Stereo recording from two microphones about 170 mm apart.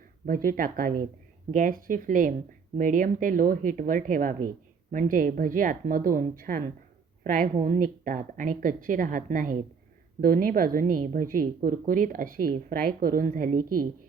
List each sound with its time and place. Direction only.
0.3 s a woman's voice: 55° right (ahead or behind)